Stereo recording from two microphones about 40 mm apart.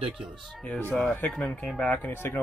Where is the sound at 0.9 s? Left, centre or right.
Left.